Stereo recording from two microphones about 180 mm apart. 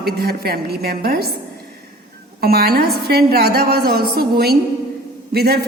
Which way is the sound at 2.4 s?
60° right (ahead or behind).